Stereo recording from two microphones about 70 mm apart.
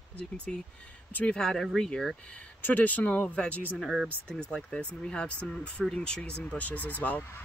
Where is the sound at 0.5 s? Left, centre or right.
Centre.